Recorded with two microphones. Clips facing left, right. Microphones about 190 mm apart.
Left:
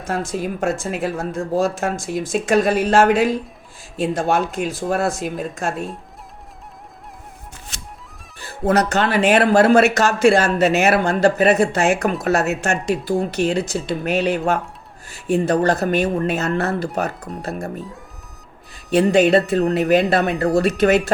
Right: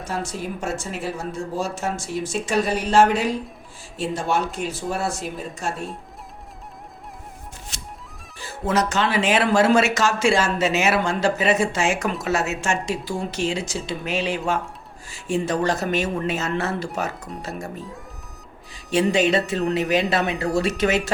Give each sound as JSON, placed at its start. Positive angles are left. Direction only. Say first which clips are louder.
{"t": 0.2, "sound": "speech", "louder": "left 6 dB", "side_deg": 90}
{"t": 2.8, "sound": "speech", "louder": "left 2 dB", "side_deg": 55}
{"t": 4.0, "sound": "speech", "louder": "left 4 dB", "side_deg": 90}
{"t": 8.4, "sound": "speech", "louder": "left 4 dB", "side_deg": 60}
{"t": 18.7, "sound": "a sound", "louder": "left 4 dB", "side_deg": 60}
{"t": 19.1, "sound": "speech", "louder": "left 6 dB", "side_deg": 60}